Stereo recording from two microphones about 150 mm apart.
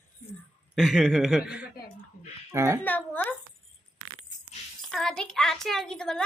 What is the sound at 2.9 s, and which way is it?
Speech, 10° left (ahead or behind).